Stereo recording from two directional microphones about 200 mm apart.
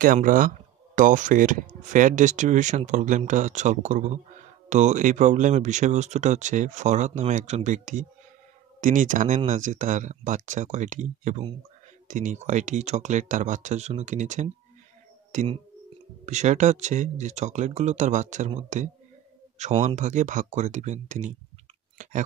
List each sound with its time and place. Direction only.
0.0 s speech: 45° right (ahead or behind)
15.3 s speech: 25° right (ahead or behind)